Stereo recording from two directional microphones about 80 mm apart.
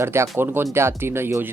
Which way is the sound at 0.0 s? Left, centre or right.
Right.